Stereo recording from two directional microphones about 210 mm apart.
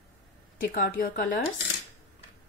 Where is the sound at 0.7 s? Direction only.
40° left (ahead or behind).